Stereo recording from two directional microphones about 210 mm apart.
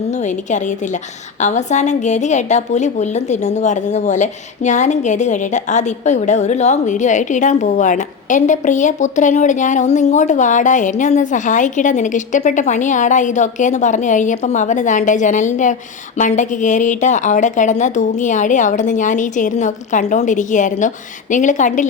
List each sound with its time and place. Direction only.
1.4 s a woman's voice: 35° left (ahead or behind)